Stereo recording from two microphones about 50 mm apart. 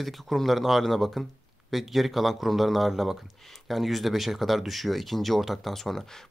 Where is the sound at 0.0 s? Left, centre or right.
Centre.